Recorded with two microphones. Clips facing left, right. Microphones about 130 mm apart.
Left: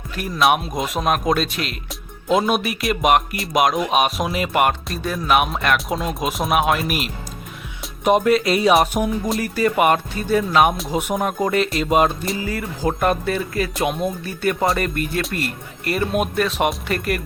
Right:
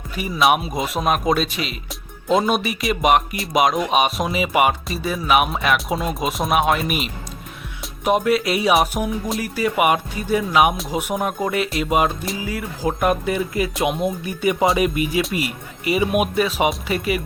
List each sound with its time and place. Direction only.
0.2 s speech: centre (ahead or behind); by 14.3 s 20° right (ahead or behind)
14.4 s speech: 5° right (ahead or behind)